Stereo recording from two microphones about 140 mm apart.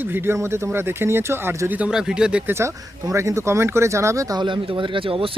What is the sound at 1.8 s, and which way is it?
Speech, 5° right (ahead or behind).